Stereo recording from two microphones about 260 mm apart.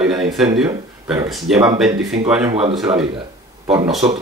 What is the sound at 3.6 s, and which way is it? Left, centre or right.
Speech, centre.